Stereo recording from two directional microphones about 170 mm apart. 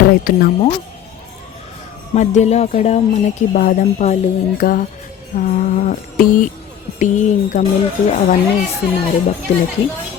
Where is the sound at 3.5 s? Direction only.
50° left (ahead or behind).